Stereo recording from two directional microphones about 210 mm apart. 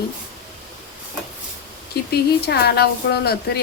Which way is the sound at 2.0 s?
50° left (ahead or behind).